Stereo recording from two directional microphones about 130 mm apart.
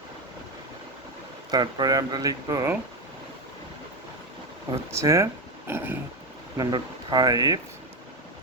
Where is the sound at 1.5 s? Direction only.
30° right (ahead or behind).